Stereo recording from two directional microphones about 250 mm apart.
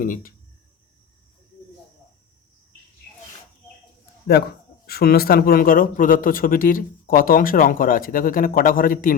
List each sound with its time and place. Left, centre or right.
0.0 s speech: left
4.9 s speech: left